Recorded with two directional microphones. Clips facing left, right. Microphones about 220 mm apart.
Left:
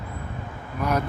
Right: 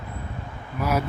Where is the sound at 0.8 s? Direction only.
5° right (ahead or behind).